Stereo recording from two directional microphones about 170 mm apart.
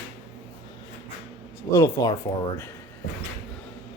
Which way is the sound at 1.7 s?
20° left (ahead or behind).